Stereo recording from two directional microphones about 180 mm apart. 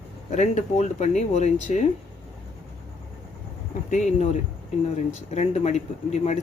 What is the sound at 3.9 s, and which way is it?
Speech, 45° left (ahead or behind).